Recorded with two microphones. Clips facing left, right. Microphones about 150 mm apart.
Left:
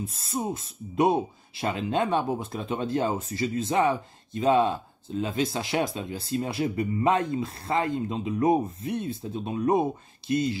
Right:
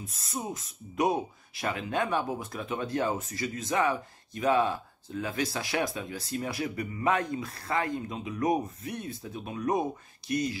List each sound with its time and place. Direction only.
0.0 s speech: 30° left (ahead or behind)